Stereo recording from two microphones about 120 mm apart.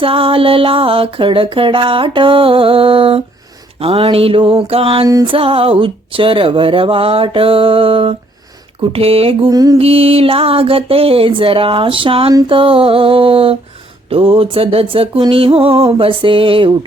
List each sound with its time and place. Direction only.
0.0 s music: 50° right (ahead or behind)
8.8 s speech: 55° right (ahead or behind)
9.5 s mantra: 30° right (ahead or behind)
9.7 s music: 55° right (ahead or behind)